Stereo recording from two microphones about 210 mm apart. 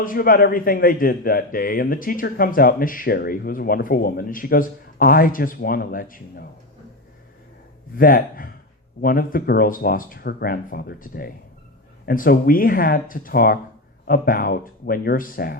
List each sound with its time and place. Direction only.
0.0 s a man's voice: 40° left (ahead or behind)
7.9 s a man's voice: 40° left (ahead or behind)